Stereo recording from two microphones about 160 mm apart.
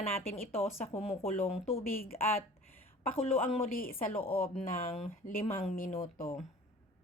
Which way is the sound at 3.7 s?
60° left (ahead or behind).